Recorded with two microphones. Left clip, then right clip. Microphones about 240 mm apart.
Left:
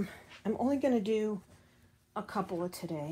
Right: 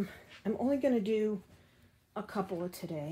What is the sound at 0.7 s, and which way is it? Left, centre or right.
Speech, centre.